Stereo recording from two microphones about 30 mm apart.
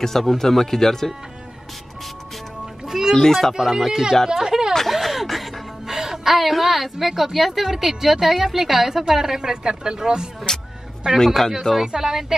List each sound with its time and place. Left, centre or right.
0.0 s speech: centre
2.6 s music: centre
3.5 s a woman's voice: centre
4.3 s a sound: centre
4.8 s a sound: centre
5.9 s a woman's voice: centre
9.4 s speech: right
11.1 s speech: centre
11.8 s a woman's voice: centre